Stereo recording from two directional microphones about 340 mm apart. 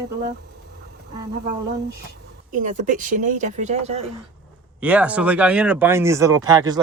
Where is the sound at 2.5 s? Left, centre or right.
Right.